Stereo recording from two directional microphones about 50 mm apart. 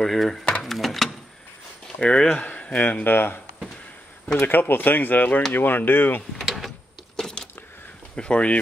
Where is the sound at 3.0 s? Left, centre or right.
Left.